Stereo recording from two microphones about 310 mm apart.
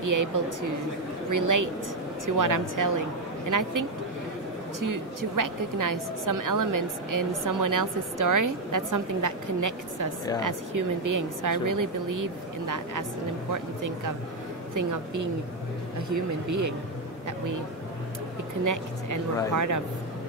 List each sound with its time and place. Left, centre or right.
0.0 s a woman's voice: right
4.7 s a woman's voice: right
18.6 s speech: right